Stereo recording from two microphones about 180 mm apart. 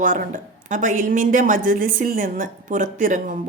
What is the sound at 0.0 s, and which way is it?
A woman's voice, 50° right (ahead or behind).